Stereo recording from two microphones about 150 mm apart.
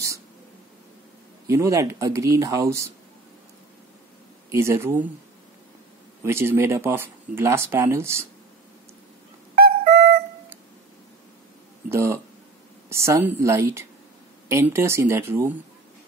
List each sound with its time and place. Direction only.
1.5 s speech: 20° right (ahead or behind)
4.5 s speech: 15° right (ahead or behind)
6.2 s speech: 15° right (ahead or behind)
9.6 s music: 90° right
11.9 s speech: 15° right (ahead or behind)